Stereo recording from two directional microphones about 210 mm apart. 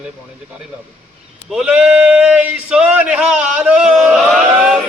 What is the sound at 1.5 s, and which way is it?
Speech, 5° right (ahead or behind).